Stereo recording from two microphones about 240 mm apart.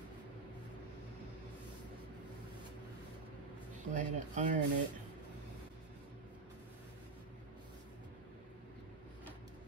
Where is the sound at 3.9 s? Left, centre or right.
Right.